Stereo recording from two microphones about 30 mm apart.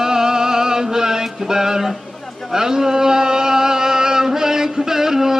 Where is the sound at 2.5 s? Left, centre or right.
Centre.